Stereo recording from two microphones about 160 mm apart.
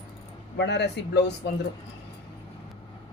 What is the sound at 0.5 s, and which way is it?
Speech, 90° left.